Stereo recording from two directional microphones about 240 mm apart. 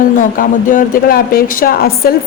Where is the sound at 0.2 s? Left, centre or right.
Left.